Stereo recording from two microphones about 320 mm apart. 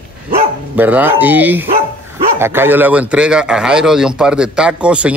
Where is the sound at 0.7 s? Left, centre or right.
Centre.